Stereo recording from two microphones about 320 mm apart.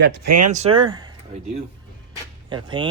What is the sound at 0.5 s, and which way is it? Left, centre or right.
Speech, centre.